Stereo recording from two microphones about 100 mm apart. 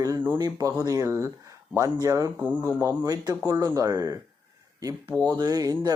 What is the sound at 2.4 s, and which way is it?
Speech, 15° right (ahead or behind).